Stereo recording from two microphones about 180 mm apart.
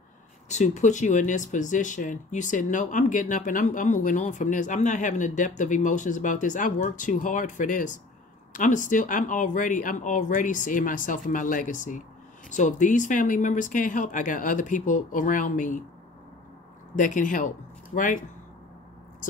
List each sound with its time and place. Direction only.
0.5 s speech: 40° left (ahead or behind)
16.9 s speech: 45° left (ahead or behind)